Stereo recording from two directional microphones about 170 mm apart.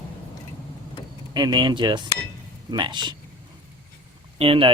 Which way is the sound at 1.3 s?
25° right (ahead or behind).